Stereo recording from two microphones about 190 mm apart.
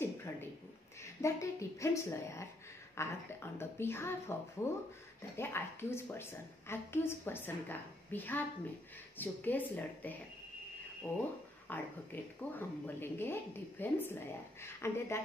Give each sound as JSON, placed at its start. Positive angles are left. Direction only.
{"t": 0.0, "sound": "a sound", "side_deg": 10}
{"t": 1.2, "sound": "a woman's voice", "side_deg": 15}
{"t": 11.6, "sound": "a woman's voice", "side_deg": 10}